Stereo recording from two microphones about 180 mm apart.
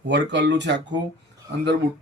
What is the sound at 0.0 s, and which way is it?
Speech, 75° right (ahead or behind).